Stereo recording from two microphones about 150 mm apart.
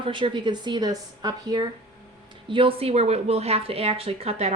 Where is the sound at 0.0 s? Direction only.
35° right (ahead or behind).